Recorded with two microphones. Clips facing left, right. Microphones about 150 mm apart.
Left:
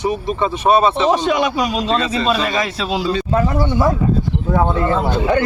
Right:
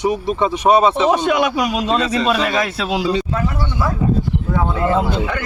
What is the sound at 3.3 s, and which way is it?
Speech, 35° left (ahead or behind).